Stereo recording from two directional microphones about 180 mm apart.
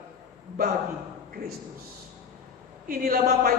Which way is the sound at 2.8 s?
55° right (ahead or behind).